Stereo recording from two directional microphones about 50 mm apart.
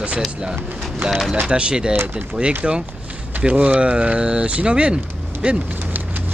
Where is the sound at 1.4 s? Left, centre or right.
Centre.